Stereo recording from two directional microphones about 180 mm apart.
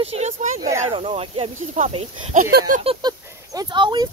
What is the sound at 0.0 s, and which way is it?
Speech, 35° right (ahead or behind).